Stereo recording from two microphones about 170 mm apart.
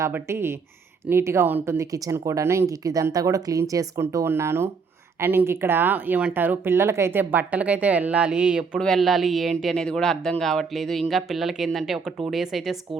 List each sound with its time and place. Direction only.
0.0 s speech: 15° right (ahead or behind)